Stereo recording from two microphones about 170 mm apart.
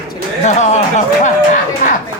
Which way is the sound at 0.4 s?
45° left (ahead or behind).